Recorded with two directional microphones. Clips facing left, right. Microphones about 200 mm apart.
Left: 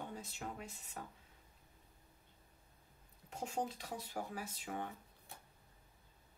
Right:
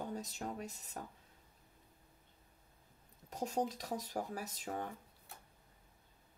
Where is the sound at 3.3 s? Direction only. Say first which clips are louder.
Right 4 dB; 40° right (ahead or behind).